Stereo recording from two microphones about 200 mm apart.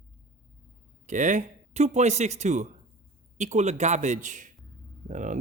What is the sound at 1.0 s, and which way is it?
Speech, 40° right (ahead or behind).